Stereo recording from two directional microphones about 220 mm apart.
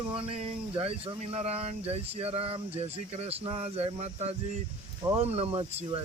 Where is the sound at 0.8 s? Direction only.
25° right (ahead or behind).